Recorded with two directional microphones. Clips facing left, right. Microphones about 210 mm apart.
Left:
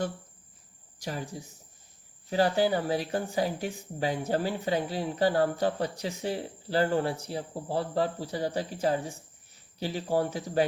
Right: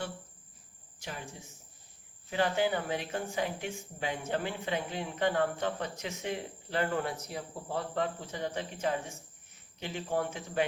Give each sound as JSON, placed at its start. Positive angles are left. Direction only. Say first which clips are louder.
{"t": 0.9, "sound": "speech", "louder": "left 7 dB", "side_deg": 35}